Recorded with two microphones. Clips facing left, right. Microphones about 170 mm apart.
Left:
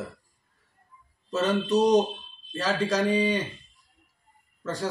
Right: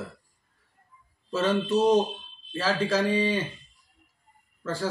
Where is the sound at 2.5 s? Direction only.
5° right (ahead or behind).